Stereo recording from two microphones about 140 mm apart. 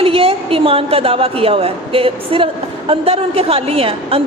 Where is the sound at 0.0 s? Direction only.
45° right (ahead or behind).